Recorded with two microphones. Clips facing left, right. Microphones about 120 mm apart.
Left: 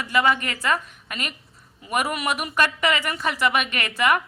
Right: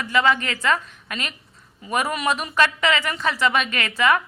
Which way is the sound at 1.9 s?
15° left (ahead or behind).